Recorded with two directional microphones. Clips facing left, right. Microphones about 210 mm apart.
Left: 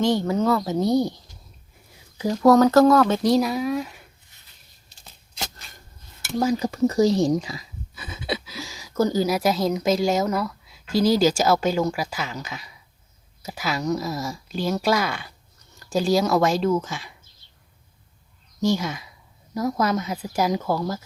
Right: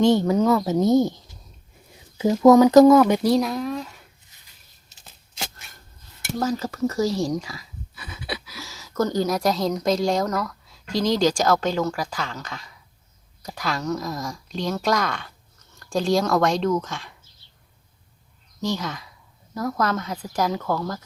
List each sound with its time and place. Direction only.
0.0 s speech: 20° right (ahead or behind)
3.3 s speech: 5° left (ahead or behind)
4.9 s scissors: centre (ahead or behind)
6.4 s speech: 15° left (ahead or behind)
18.6 s speech: 10° left (ahead or behind)